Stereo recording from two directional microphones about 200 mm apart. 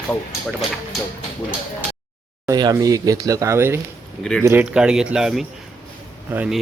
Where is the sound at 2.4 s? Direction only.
20° right (ahead or behind).